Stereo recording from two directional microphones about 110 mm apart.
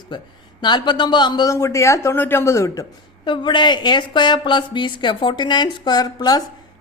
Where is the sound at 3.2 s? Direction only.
45° left (ahead or behind).